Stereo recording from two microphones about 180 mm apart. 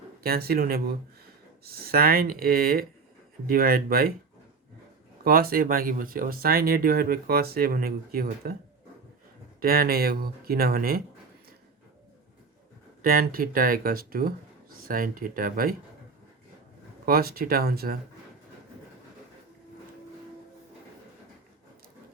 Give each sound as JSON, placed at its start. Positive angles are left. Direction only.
{"t": 0.2, "sound": "speech", "side_deg": -55}
{"t": 5.2, "sound": "speech", "side_deg": -55}
{"t": 9.6, "sound": "speech", "side_deg": -55}
{"t": 13.0, "sound": "speech", "side_deg": -55}
{"t": 17.1, "sound": "speech", "side_deg": -55}